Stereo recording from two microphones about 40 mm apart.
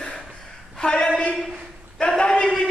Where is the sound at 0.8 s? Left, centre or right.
Centre.